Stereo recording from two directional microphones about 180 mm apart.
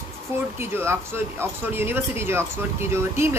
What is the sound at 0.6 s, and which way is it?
Speech, 15° right (ahead or behind).